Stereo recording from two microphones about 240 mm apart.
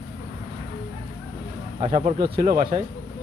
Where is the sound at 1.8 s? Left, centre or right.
Right.